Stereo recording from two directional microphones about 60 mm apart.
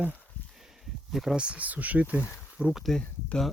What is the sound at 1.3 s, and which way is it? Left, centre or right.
Speech, centre.